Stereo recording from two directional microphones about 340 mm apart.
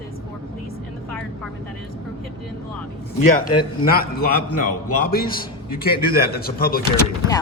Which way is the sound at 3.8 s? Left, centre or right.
Left.